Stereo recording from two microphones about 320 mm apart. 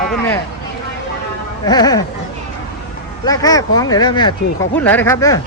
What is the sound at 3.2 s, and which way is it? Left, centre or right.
Speech, centre.